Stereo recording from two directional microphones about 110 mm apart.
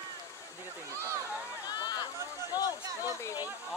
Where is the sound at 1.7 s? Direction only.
40° left (ahead or behind).